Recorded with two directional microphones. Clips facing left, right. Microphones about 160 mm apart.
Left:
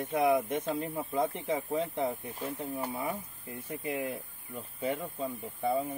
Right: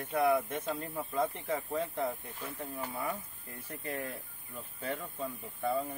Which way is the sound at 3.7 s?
10° left (ahead or behind).